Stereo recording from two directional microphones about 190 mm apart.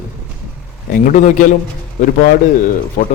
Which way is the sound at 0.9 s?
45° left (ahead or behind).